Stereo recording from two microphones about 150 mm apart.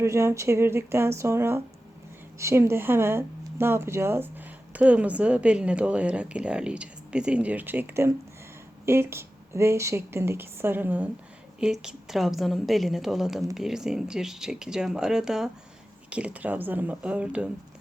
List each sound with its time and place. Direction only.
0.0 s speech: 20° right (ahead or behind)